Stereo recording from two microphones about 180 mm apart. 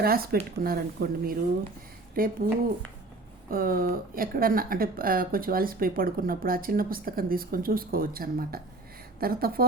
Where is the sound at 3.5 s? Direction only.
50° right (ahead or behind).